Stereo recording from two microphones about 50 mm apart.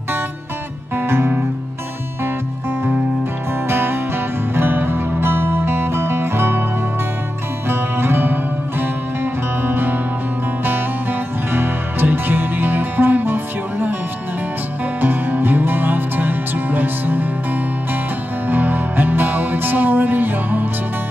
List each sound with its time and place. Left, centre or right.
0.9 s music: right
3.6 s music: right
7.6 s music: right
15.0 s music: right
18.5 s music: right